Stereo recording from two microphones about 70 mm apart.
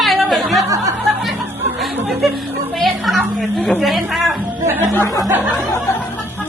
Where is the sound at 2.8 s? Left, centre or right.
Centre.